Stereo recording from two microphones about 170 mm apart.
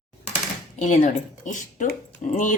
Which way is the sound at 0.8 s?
45° left (ahead or behind).